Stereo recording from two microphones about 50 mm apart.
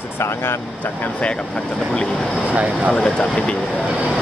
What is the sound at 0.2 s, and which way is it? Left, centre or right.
Speech, left.